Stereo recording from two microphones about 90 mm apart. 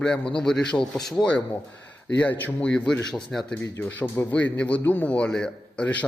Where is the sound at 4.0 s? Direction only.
20° left (ahead or behind).